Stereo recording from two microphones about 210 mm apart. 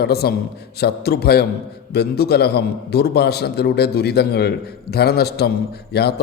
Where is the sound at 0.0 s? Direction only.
50° left (ahead or behind).